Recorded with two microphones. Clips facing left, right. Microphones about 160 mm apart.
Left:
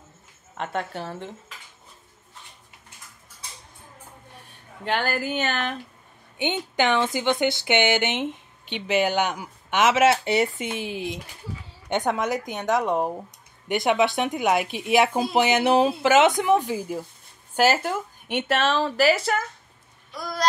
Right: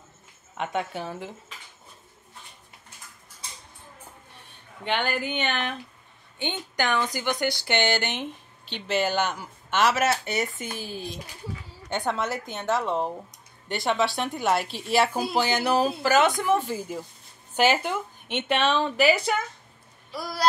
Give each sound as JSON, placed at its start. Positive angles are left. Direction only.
{"t": 0.6, "sound": "a woman's voice", "side_deg": 0}
{"t": 4.8, "sound": "a woman's voice", "side_deg": 0}
{"t": 6.3, "sound": "speech", "side_deg": 20}
{"t": 11.9, "sound": "a woman's voice", "side_deg": 15}
{"t": 20.1, "sound": "a sound", "side_deg": -5}